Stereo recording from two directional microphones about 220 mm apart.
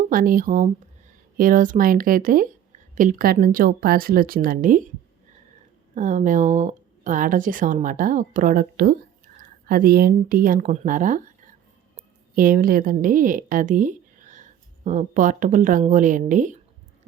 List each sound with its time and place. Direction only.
0.1 s speech: 40° right (ahead or behind)
5.9 s a woman's voice: 35° right (ahead or behind)